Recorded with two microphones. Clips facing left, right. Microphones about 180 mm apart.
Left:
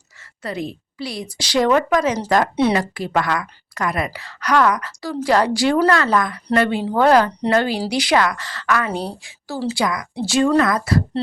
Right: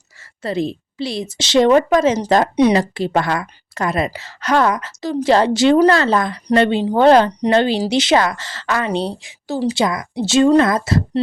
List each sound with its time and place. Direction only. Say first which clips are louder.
0.4 s a woman's voice: right 6 dB; 25° right (ahead or behind)